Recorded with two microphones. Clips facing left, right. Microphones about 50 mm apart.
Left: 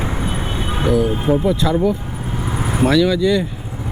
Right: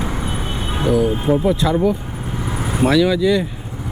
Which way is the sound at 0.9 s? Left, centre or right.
Centre.